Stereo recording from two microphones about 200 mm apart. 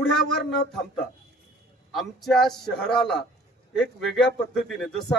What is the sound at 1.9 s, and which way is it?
A man's voice, centre (ahead or behind).